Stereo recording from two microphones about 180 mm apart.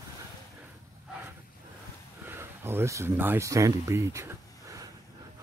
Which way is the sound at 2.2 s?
15° right (ahead or behind).